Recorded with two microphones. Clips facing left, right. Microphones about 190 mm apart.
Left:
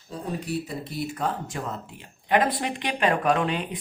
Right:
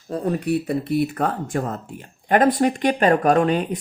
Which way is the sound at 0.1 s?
60° right (ahead or behind).